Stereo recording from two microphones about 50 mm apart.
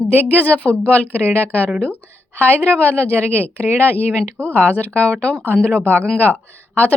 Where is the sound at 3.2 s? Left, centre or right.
Right.